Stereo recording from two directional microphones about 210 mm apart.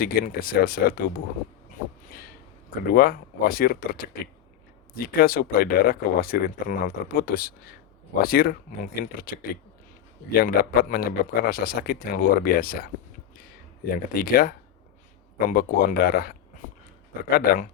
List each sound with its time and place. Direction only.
0.0 s speech: 45° left (ahead or behind)
2.9 s speech: 45° left (ahead or behind)
5.0 s speech: 45° left (ahead or behind)
10.4 s speech: 45° left (ahead or behind)
13.9 s speech: 45° left (ahead or behind)